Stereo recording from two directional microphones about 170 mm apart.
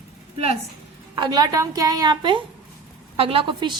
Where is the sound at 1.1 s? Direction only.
25° right (ahead or behind).